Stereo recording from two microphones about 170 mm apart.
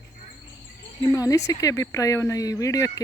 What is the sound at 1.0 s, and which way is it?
Speech, 20° left (ahead or behind).